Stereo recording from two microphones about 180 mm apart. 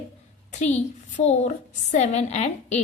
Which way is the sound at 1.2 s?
40° left (ahead or behind).